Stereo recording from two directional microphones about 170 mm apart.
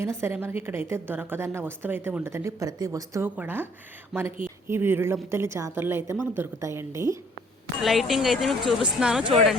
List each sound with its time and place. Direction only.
0.0 s a woman's voice: 15° right (ahead or behind)
7.9 s speech: centre (ahead or behind)